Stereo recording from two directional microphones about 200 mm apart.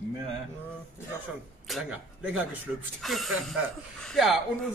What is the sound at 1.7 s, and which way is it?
A man's voice, 5° right (ahead or behind).